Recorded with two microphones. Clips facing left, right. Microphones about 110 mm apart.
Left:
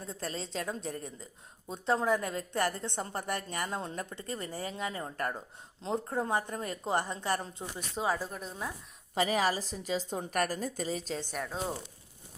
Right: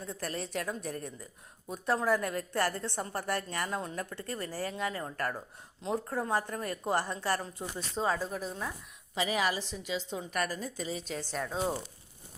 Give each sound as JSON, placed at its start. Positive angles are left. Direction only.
{"t": 0.0, "sound": "a woman's voice", "side_deg": 25}
{"t": 7.8, "sound": "speech", "side_deg": 10}
{"t": 8.3, "sound": "speech", "side_deg": 0}
{"t": 9.1, "sound": "a woman's voice", "side_deg": 45}
{"t": 11.2, "sound": "speech", "side_deg": 10}
{"t": 11.4, "sound": "speech", "side_deg": 0}